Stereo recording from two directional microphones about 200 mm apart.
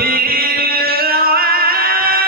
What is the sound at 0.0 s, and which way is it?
Music, 50° right (ahead or behind).